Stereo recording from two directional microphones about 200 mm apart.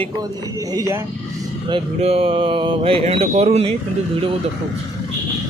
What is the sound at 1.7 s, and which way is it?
Mantra, 30° right (ahead or behind).